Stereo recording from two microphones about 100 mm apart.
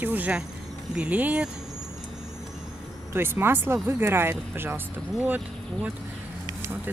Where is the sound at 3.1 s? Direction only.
25° right (ahead or behind).